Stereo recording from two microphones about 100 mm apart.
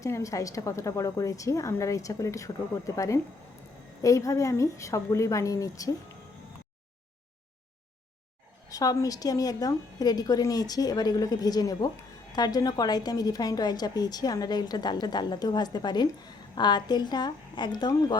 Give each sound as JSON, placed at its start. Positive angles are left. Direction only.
{"t": 0.0, "sound": "a woman's voice", "side_deg": 35}
{"t": 8.7, "sound": "a woman's voice", "side_deg": 35}